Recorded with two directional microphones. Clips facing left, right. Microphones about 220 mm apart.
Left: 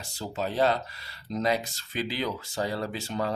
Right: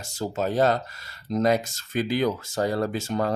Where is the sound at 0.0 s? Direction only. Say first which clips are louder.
Right 5 dB; 45° right (ahead or behind).